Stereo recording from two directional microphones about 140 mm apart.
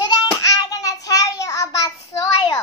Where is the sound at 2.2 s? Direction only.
25° left (ahead or behind).